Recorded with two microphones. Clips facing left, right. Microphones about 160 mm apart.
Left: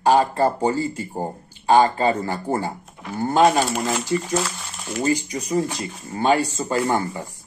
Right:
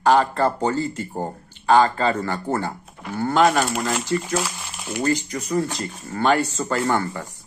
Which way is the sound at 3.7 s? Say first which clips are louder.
Left 1 dB; centre (ahead or behind).